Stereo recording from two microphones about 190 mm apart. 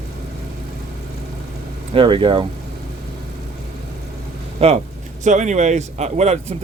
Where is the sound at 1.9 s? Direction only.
25° right (ahead or behind).